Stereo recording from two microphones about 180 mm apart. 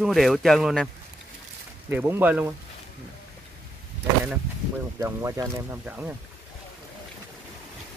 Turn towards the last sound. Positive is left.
turn(degrees=-10)  # may be behind; listen again after turning